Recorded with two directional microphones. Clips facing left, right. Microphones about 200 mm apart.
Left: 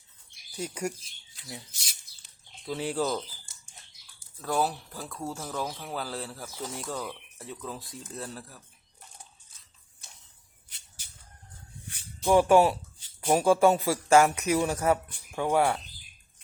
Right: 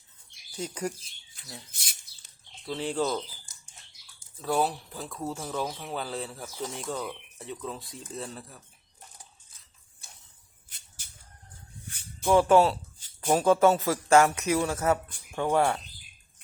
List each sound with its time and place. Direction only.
0.5 s speech: 10° left (ahead or behind)
2.6 s speech: 10° left (ahead or behind)
4.4 s speech: 5° right (ahead or behind)
10.7 s a sound: 50° right (ahead or behind)
12.2 s speech: 15° left (ahead or behind)